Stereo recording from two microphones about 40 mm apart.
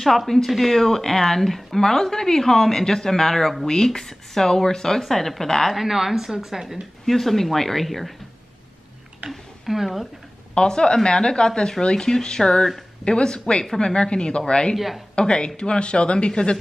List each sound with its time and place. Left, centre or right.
0.5 s a woman's voice: centre
5.8 s a woman's voice: centre
7.1 s speech: centre
9.3 s speech: centre
10.5 s speech: left